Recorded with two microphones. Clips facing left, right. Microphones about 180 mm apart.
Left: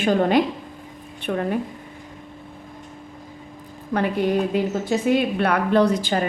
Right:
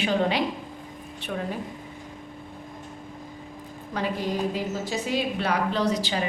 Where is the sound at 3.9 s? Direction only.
60° left (ahead or behind).